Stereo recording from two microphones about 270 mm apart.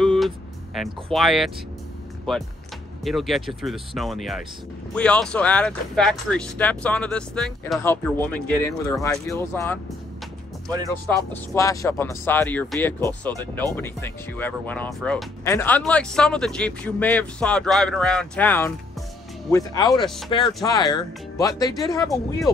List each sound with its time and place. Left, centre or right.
0.0 s music: centre
0.8 s speech: centre
11.5 s speech: centre